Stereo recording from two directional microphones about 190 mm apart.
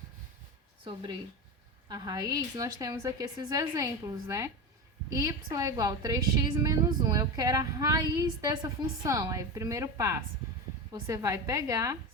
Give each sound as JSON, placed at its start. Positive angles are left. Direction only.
{"t": 1.9, "sound": "a woman's voice", "side_deg": -20}